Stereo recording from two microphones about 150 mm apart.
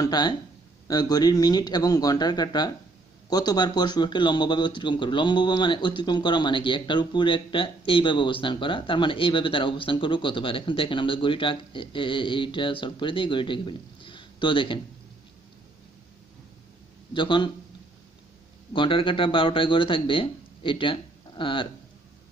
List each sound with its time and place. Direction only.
0.0 s a man's voice: 30° left (ahead or behind)
17.1 s a man's voice: 30° left (ahead or behind)
18.7 s speech: 35° left (ahead or behind)